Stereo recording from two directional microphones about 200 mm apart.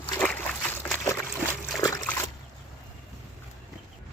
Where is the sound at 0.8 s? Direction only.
10° left (ahead or behind).